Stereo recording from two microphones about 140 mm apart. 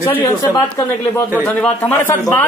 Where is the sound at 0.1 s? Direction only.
15° left (ahead or behind).